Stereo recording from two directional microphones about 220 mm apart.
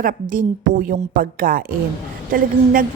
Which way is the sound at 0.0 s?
40° right (ahead or behind).